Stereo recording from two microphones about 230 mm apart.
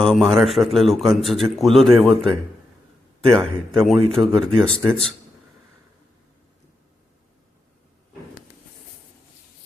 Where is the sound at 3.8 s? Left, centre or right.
Centre.